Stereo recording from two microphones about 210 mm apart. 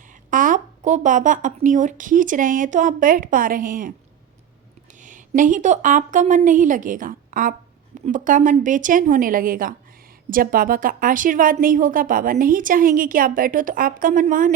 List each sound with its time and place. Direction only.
0.3 s a woman's voice: 40° right (ahead or behind)
4.9 s a woman's voice: 35° right (ahead or behind)